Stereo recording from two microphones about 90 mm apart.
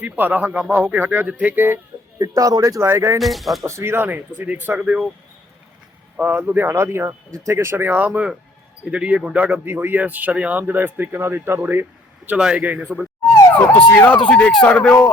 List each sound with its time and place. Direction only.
0.0 s speech: 20° right (ahead or behind)
2.1 s speech: 45° right (ahead or behind)
2.8 s speech: 30° right (ahead or behind)
3.2 s speech: centre (ahead or behind)
3.7 s speech: 30° right (ahead or behind)
6.3 s speech: 20° right (ahead or behind)
12.4 s a man's voice: 10° right (ahead or behind)
13.9 s speech: 20° left (ahead or behind)